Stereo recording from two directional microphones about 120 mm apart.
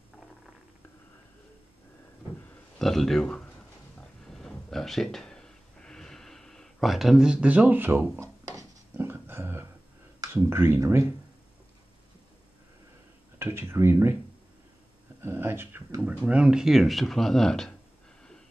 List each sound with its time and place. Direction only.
2.8 s speech: centre (ahead or behind)
4.3 s a sound: centre (ahead or behind); by 8.6 s 25° right (ahead or behind)
8.9 s dog: 20° right (ahead or behind)
10.2 s speech: 20° right (ahead or behind)
13.4 s speech: 20° right (ahead or behind)
15.2 s speech: 20° right (ahead or behind); by 17.7 s 5° left (ahead or behind)